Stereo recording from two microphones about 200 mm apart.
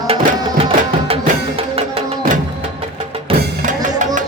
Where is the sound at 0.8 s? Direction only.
30° right (ahead or behind).